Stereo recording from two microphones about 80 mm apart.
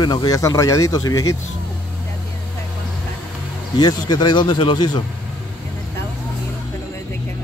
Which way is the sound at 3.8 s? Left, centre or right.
Left.